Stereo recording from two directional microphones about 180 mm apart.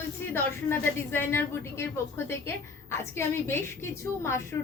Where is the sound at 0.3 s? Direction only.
10° left (ahead or behind).